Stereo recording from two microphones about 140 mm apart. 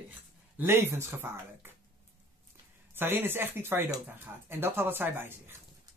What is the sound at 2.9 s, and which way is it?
Speech, 15° right (ahead or behind).